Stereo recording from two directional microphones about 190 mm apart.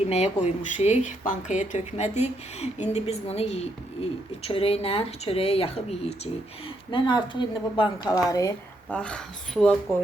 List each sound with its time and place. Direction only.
0.0 s a woman's voice: 35° left (ahead or behind); by 9.0 s 15° left (ahead or behind)
9.0 s speech: 5° left (ahead or behind)